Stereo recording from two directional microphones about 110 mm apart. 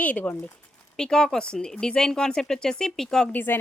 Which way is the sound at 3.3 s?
20° left (ahead or behind).